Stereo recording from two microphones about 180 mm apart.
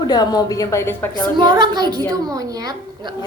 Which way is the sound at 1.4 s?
25° right (ahead or behind).